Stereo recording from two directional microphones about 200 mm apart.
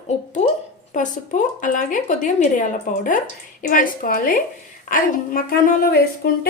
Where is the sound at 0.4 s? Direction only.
30° left (ahead or behind).